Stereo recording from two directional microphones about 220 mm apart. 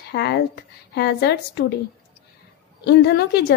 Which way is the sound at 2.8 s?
50° left (ahead or behind).